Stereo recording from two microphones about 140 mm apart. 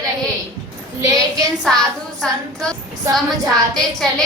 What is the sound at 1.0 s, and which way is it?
Speech, 25° right (ahead or behind).